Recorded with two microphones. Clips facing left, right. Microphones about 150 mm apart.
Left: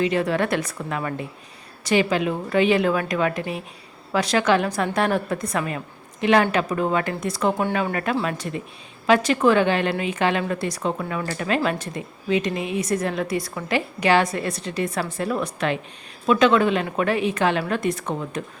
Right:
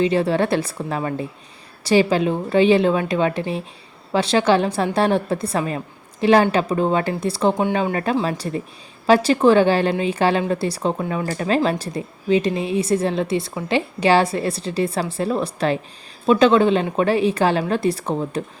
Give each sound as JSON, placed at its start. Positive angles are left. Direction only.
{"t": 0.0, "sound": "a woman's voice", "side_deg": -30}